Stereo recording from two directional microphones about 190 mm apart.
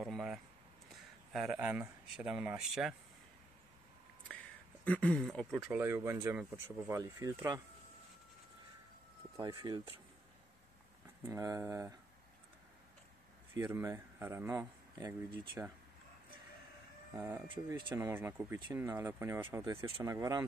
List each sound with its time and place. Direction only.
0.0 s a sound: centre (ahead or behind)
1.5 s speech: 10° right (ahead or behind)
4.8 s speech: 5° left (ahead or behind); by 7.6 s 20° right (ahead or behind)
9.4 s speech: 25° right (ahead or behind)
11.2 s speech: 15° right (ahead or behind)
13.7 s speech: 15° right (ahead or behind)
17.1 s speech: 15° right (ahead or behind)